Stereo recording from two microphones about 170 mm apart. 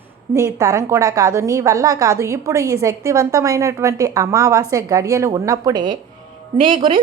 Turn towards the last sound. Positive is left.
turn(degrees=-30)  # may be behind; listen again after turning